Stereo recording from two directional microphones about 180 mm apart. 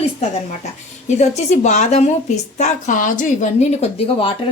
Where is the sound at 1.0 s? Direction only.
40° left (ahead or behind).